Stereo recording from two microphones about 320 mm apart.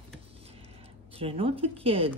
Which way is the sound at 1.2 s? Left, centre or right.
Centre.